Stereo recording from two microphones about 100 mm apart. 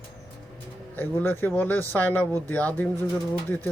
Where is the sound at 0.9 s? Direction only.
20° left (ahead or behind).